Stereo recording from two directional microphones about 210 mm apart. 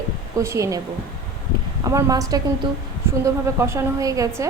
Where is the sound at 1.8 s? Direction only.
15° right (ahead or behind).